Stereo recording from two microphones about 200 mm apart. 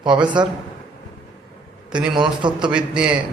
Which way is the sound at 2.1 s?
25° right (ahead or behind).